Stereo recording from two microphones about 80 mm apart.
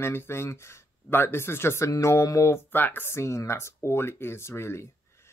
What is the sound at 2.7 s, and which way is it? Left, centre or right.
Speech, left.